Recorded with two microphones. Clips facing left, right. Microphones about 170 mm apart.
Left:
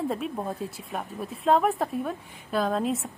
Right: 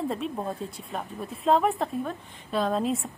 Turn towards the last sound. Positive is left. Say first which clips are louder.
# even
turn(degrees=0)  # may be behind; listen again after turning